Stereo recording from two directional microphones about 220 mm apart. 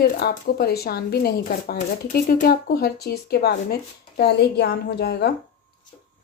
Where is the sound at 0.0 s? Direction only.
45° left (ahead or behind).